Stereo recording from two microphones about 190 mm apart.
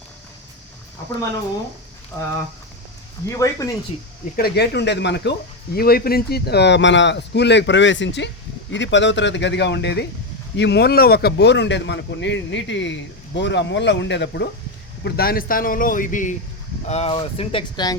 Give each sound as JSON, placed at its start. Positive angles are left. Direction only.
{"t": 3.2, "sound": "speech", "side_deg": 15}
{"t": 4.4, "sound": "speech", "side_deg": 55}
{"t": 15.0, "sound": "speech", "side_deg": 55}